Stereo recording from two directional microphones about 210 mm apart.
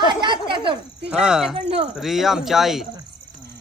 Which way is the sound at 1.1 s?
5° right (ahead or behind).